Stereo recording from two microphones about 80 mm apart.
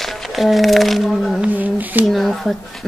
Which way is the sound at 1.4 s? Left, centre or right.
Right.